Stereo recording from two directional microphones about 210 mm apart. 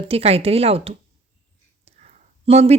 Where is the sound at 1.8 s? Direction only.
35° right (ahead or behind).